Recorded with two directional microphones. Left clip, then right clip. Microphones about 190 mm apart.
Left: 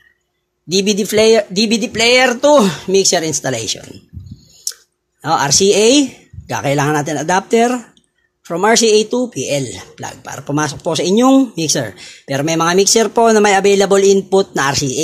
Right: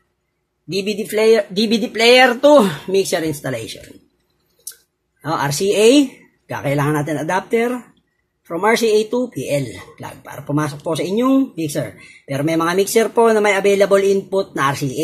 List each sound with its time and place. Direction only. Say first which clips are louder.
0.8 s speech: left 5 dB; 40° left (ahead or behind)
1.2 s speech: left 2 dB; 20° left (ahead or behind)
5.2 s speech: left 7 dB; 30° left (ahead or behind)